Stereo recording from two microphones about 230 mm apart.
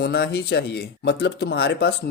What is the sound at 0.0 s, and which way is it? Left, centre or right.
Speech, left.